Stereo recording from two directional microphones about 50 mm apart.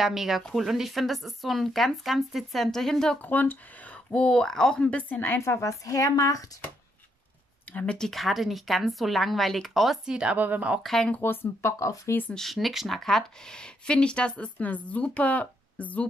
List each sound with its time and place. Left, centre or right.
0.0 s speech: centre
3.2 s speech: left; by 4.8 s centre
4.8 s speech: left
5.4 s speech: left
7.7 s speech: left
8.1 s speech: centre
10.0 s a woman's voice: centre
10.3 s speech: right
10.8 s speech: centre
11.6 s speech: left
12.4 s speech: centre; by 16.1 s left